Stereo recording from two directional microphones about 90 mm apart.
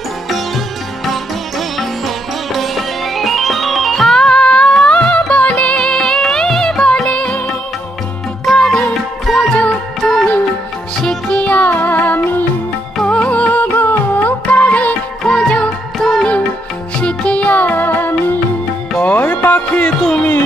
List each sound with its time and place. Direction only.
1.8 s sitar: centre (ahead or behind)
8.5 s music: centre (ahead or behind)
11.0 s music: 5° left (ahead or behind)